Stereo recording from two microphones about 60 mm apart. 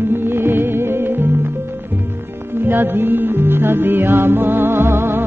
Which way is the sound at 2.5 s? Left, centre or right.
Right.